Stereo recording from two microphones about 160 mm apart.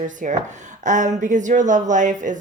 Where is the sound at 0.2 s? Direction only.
50° right (ahead or behind).